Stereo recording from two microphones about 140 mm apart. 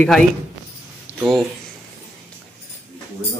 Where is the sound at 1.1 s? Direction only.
15° left (ahead or behind).